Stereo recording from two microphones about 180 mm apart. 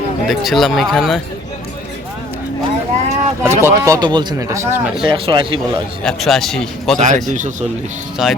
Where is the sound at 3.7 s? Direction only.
15° right (ahead or behind).